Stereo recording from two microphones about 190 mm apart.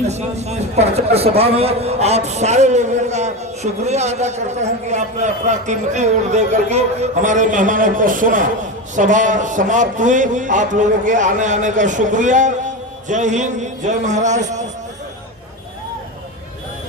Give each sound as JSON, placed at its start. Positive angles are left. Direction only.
{"t": 0.1, "sound": "a man's voice", "side_deg": -35}